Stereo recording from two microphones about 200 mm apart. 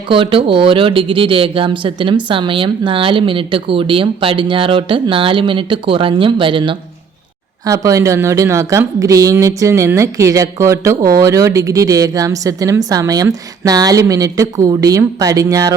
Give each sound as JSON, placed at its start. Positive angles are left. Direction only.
{"t": 0.1, "sound": "a woman's voice", "side_deg": -25}